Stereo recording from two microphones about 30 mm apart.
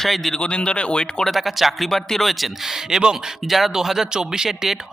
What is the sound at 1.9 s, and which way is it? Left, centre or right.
Speech, centre.